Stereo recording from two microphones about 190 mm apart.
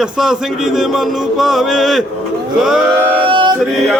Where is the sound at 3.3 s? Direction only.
25° right (ahead or behind).